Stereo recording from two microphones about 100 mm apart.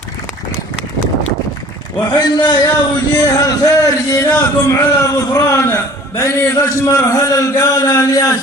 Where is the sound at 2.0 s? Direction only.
45° left (ahead or behind).